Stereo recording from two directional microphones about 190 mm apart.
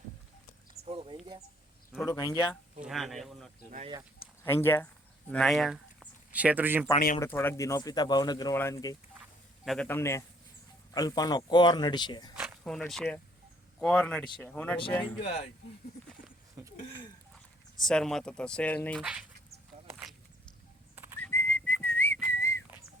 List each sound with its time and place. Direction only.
0.9 s a sound: 30° right (ahead or behind)
2.0 s speech: 20° left (ahead or behind)
2.8 s speech: centre (ahead or behind)
4.4 s a man's voice: 10° left (ahead or behind)
5.3 s speech: centre (ahead or behind)
7.2 s speech: 10° left (ahead or behind)
9.6 s a man's voice: 5° left (ahead or behind); by 12.3 s 25° left (ahead or behind)
12.4 s a sound: centre (ahead or behind)
13.7 s a man's voice: 5° left (ahead or behind)
15.2 s speech: 60° left (ahead or behind)
17.7 s speech: centre (ahead or behind)
20.9 s whistling: 10° right (ahead or behind)
21.2 s whistling: 10° left (ahead or behind)